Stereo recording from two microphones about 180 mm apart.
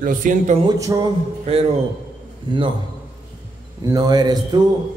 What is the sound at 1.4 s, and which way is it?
A man's voice, 35° right (ahead or behind).